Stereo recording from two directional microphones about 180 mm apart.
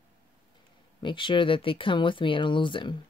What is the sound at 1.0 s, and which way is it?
Speech, 25° left (ahead or behind).